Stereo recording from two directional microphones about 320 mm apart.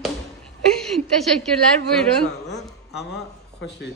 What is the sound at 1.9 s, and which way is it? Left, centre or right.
Speech, centre.